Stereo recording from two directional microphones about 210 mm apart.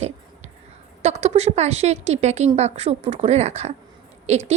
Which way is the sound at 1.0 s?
30° right (ahead or behind).